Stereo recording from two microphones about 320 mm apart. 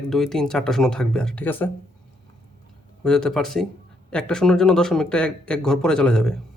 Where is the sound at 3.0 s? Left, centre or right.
Centre.